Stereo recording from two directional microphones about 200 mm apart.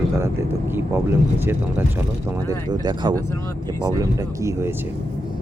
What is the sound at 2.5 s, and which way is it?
Speech, 20° right (ahead or behind).